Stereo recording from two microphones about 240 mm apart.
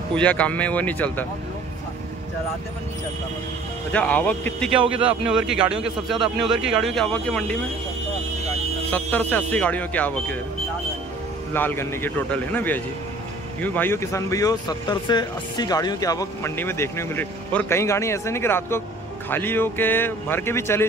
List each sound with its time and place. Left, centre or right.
0.1 s speech: centre
3.9 s speech: centre
4.8 s a man's voice: right
5.2 s speech: centre
8.9 s speech: centre
11.5 s speech: centre